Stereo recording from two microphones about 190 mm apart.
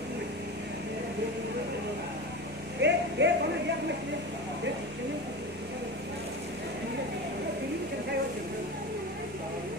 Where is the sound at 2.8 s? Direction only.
65° right (ahead or behind).